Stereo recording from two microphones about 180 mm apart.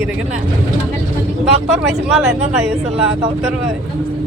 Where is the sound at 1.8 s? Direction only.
5° right (ahead or behind).